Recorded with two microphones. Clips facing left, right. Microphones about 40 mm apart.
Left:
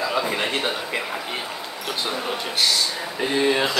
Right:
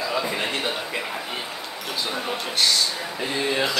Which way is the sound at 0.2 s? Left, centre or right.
Centre.